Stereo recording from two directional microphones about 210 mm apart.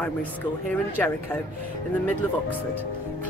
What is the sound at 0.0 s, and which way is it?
Speech, 5° left (ahead or behind).